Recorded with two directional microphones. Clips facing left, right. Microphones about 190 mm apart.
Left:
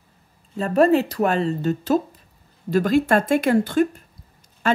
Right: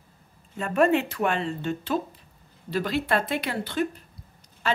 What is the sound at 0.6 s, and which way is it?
A woman's voice, 35° left (ahead or behind).